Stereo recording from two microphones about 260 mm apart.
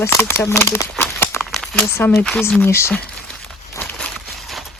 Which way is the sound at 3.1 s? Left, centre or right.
Centre.